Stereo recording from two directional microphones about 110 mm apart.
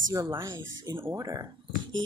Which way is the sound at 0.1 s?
30° right (ahead or behind).